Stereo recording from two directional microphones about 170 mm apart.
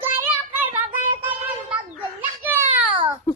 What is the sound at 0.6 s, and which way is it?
Child singing, 10° right (ahead or behind).